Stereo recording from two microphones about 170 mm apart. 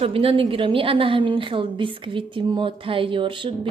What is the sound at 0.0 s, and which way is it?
A woman's voice, 35° right (ahead or behind).